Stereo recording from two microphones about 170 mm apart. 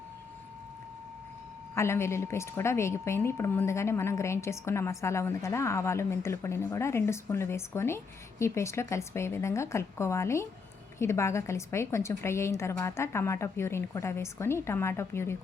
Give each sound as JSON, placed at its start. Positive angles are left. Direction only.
{"t": 1.7, "sound": "a woman's voice", "side_deg": 15}